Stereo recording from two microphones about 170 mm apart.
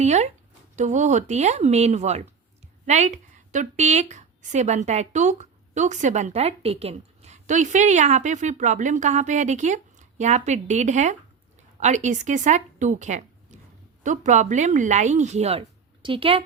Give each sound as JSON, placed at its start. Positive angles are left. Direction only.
{"t": 0.0, "sound": "a woman's voice", "side_deg": -40}